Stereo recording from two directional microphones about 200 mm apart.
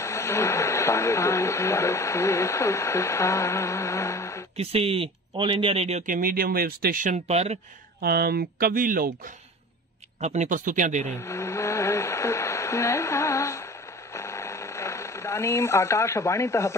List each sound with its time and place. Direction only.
0.0 s speech: 15° left (ahead or behind)
4.6 s speech: 30° right (ahead or behind)
8.0 s speech: 50° right (ahead or behind)
10.2 s speech: 35° right (ahead or behind)
11.1 s speech: 15° left (ahead or behind)
14.1 s a sound: 15° left (ahead or behind)